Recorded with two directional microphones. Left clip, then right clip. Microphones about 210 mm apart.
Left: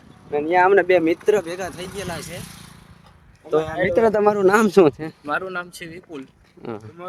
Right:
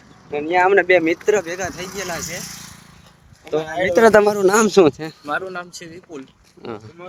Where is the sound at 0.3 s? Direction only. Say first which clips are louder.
Even; 5° left (ahead or behind).